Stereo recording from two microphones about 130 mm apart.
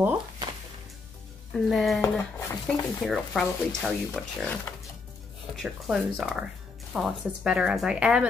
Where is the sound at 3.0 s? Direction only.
Centre (ahead or behind).